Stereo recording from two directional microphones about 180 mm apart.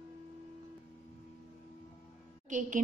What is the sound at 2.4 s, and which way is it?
Speech, 45° right (ahead or behind).